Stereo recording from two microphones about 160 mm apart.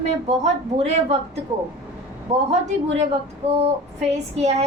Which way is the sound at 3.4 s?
40° right (ahead or behind).